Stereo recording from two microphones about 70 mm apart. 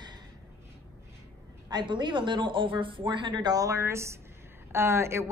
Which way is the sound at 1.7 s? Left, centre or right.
Right.